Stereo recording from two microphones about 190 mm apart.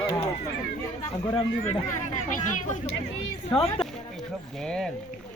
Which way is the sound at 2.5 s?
40° left (ahead or behind).